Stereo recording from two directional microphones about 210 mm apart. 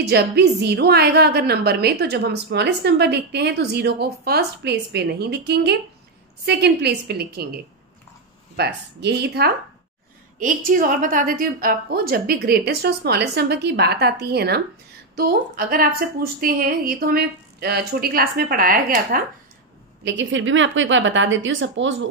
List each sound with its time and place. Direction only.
0.1 s a woman's voice: 50° right (ahead or behind)
8.5 s a woman's voice: 55° right (ahead or behind)
10.4 s a woman's voice: 40° right (ahead or behind)
20.0 s a woman's voice: 55° right (ahead or behind)